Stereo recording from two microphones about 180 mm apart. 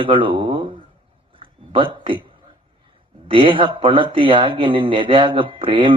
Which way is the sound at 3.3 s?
30° right (ahead or behind).